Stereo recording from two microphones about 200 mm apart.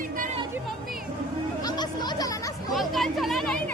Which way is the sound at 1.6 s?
20° left (ahead or behind).